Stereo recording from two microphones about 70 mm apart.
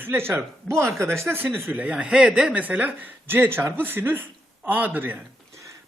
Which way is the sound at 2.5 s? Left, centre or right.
Right.